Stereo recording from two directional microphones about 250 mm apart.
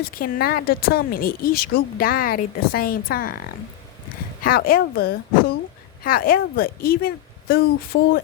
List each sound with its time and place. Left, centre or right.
0.1 s speech: left
4.4 s speech: left
7.9 s speech: left